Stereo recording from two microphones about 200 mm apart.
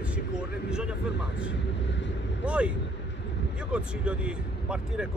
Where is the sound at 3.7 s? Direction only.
5° right (ahead or behind).